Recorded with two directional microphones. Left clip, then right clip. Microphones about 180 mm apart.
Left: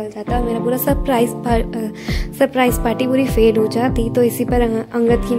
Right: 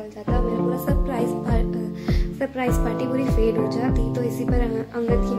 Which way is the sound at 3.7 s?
50° left (ahead or behind).